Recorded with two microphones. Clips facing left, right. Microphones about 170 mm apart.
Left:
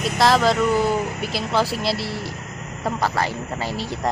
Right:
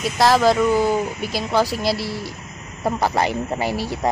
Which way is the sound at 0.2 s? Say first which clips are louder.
Right 2 dB; centre (ahead or behind).